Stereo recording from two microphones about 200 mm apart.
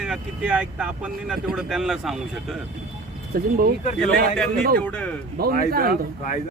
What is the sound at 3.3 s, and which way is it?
Speech, 50° right (ahead or behind).